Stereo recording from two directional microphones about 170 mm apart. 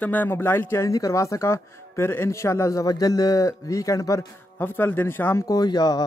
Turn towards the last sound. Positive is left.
turn(degrees=25)  # may be behind; listen again after turning